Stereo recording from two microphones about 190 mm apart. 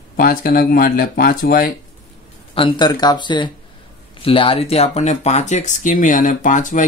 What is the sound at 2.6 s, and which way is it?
Speech, 25° left (ahead or behind).